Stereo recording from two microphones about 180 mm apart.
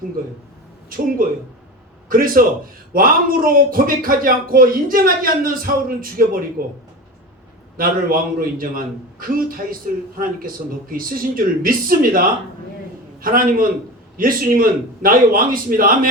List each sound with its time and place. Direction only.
0.9 s a man's voice: 50° right (ahead or behind)
7.8 s a man's voice: 50° right (ahead or behind)
13.2 s a man's voice: 50° right (ahead or behind)